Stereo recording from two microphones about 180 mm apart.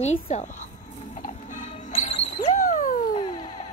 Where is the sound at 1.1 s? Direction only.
45° left (ahead or behind).